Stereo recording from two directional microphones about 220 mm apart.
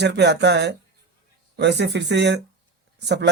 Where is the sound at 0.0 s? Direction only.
50° right (ahead or behind).